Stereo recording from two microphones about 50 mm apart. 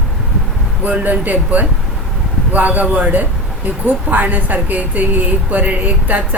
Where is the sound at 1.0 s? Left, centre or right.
Right.